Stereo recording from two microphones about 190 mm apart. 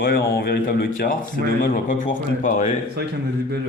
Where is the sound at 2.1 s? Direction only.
40° left (ahead or behind).